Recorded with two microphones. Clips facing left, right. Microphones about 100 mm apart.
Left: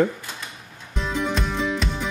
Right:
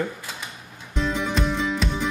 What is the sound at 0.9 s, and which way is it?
Music, centre (ahead or behind).